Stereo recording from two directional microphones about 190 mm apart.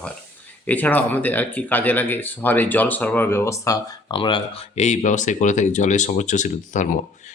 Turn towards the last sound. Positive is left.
turn(degrees=40)  # may be behind; listen again after turning